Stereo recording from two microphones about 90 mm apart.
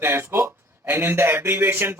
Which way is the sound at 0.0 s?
25° right (ahead or behind).